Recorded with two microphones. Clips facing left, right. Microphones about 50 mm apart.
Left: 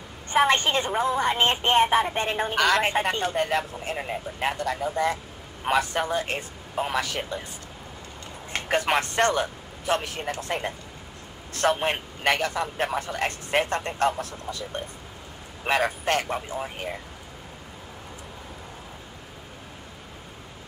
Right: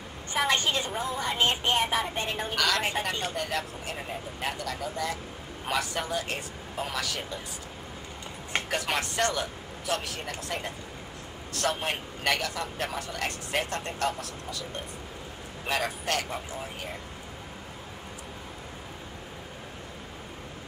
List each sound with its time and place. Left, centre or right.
0.3 s a woman's voice: left
8.6 s speech: left
11.5 s a woman's voice: left